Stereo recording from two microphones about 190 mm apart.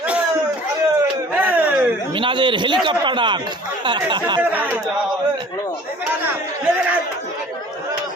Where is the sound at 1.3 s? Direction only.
10° right (ahead or behind).